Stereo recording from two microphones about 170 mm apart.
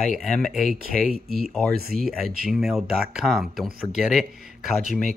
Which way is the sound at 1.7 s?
60° right (ahead or behind).